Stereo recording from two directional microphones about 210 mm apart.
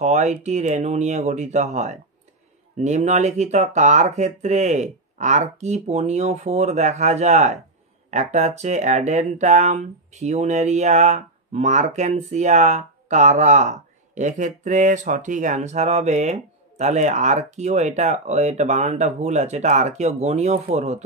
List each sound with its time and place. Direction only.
0.0 s speech: 35° right (ahead or behind)